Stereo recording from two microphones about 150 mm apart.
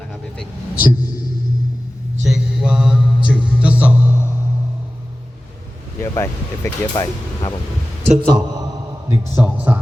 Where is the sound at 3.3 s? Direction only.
10° right (ahead or behind).